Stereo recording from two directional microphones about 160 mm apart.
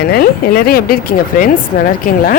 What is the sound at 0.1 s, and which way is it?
Speech, 70° left (ahead or behind).